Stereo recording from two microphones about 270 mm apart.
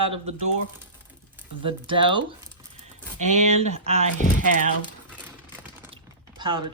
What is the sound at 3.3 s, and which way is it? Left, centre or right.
Speech, right.